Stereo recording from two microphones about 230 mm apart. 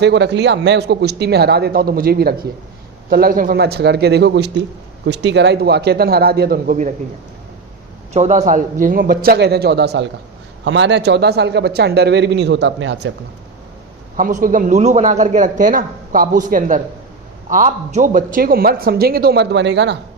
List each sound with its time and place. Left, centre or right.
0.0 s a man's voice: right
8.1 s a man's voice: right
14.2 s a man's voice: right